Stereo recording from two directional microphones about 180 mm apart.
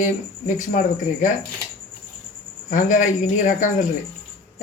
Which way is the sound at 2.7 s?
45° left (ahead or behind).